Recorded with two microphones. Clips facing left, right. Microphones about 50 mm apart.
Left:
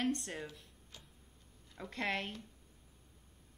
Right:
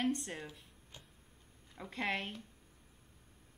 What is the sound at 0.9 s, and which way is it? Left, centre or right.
Tick-tock, right.